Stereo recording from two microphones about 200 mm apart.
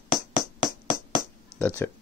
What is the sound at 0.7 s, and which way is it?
Music, 20° right (ahead or behind).